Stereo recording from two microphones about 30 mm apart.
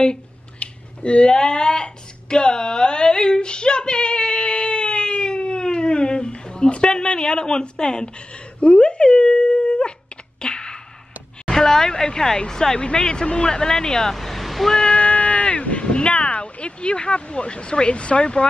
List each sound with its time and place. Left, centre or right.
0.6 s finger snapping: left
8.5 s dog: left
10.4 s sneeze: left
11.4 s speech: centre
14.1 s vehicle: centre
14.7 s speech: left
15.0 s a sound: left
15.9 s speech: left